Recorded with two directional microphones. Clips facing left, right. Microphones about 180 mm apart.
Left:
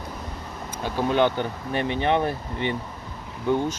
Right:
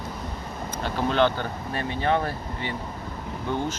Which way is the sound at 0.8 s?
15° left (ahead or behind).